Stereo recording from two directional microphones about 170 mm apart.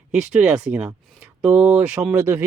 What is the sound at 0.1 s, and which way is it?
Speech, 5° right (ahead or behind).